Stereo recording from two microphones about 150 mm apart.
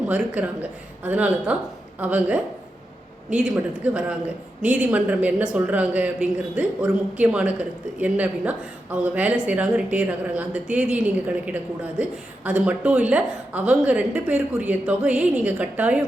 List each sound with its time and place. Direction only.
0.1 s a man's voice: 10° right (ahead or behind)